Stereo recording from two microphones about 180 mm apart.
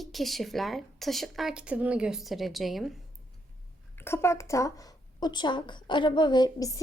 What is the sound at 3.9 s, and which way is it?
Speech, 15° left (ahead or behind).